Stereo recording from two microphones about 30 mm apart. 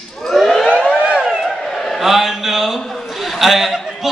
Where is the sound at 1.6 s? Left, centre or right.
Centre.